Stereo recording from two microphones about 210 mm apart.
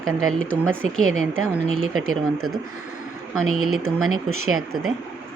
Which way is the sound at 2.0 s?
80° right.